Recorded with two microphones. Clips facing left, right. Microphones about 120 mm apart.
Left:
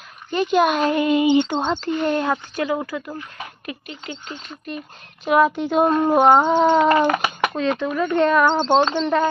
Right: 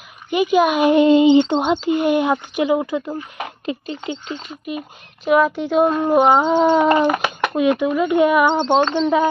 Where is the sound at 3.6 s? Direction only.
25° right (ahead or behind).